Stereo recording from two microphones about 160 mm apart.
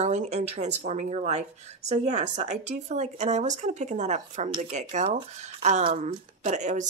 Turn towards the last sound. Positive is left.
turn(degrees=-50)  # may be behind; listen again after turning